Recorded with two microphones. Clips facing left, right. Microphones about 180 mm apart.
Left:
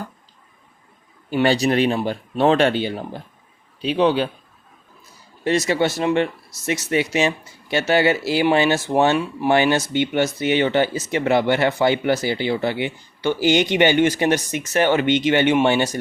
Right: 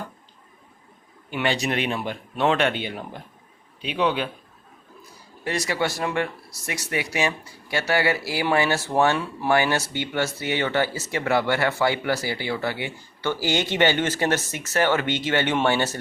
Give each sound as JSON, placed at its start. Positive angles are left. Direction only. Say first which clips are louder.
{"t": 1.3, "sound": "speech", "louder": "left 7 dB", "side_deg": 35}
{"t": 5.5, "sound": "speech", "louder": "left 6 dB", "side_deg": 25}